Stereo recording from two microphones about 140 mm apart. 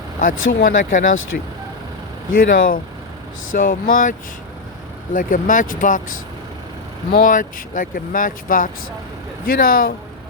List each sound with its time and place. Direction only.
0.2 s speech: 75° left (ahead or behind)
1.3 s speech: 90° left
3.5 s speech: 70° left (ahead or behind)
5.1 s speech: 70° left (ahead or behind)
9.4 s speech: 90° left